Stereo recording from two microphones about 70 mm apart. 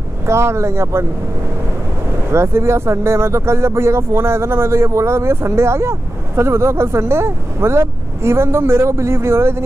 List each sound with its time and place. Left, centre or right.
0.3 s speech: right
2.3 s speech: right